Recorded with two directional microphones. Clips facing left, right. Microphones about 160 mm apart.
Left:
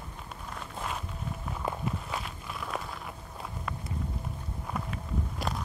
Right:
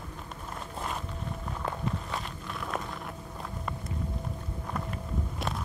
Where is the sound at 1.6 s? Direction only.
5° left (ahead or behind).